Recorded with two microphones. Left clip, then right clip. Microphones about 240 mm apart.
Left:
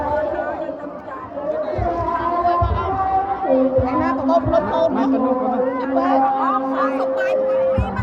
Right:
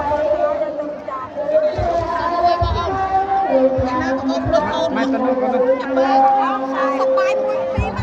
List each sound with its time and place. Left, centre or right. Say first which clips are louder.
6.0 s speech: right 2 dB; left